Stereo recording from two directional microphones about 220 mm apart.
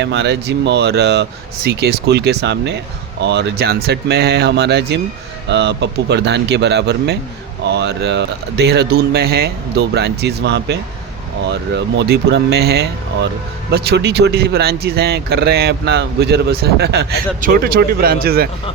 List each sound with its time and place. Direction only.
0.0 s speech: 50° right (ahead or behind)